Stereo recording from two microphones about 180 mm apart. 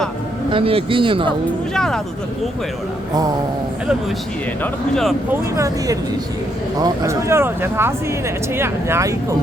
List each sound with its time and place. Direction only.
0.5 s speech: 30° right (ahead or behind)
1.7 s speech: 5° left (ahead or behind)
4.6 s speech: centre (ahead or behind)
5.3 s speech: 15° right (ahead or behind)